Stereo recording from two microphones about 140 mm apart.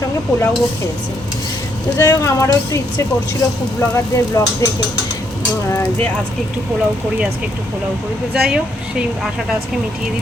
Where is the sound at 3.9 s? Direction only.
20° left (ahead or behind).